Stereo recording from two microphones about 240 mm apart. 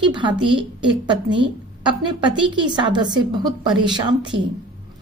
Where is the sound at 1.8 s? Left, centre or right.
Centre.